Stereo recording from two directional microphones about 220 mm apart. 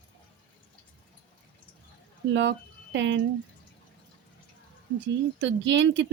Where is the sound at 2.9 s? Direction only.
55° right (ahead or behind).